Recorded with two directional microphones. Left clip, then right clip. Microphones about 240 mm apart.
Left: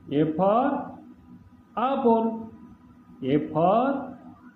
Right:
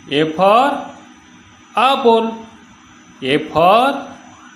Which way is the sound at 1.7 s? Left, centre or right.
Right.